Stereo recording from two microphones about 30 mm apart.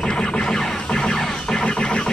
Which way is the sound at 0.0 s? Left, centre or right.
Left.